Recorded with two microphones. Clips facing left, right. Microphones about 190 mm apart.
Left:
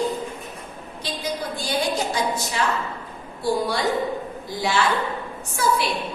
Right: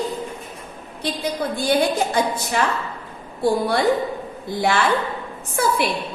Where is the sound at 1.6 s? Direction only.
55° right (ahead or behind).